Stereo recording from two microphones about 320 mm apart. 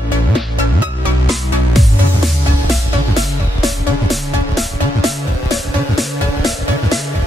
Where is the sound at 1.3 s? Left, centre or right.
Centre.